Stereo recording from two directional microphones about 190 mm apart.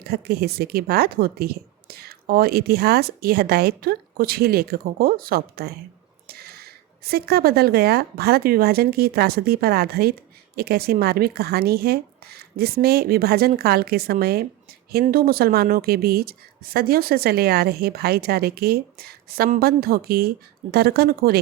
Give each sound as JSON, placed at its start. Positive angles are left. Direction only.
{"t": 0.0, "sound": "a woman's voice", "side_deg": -55}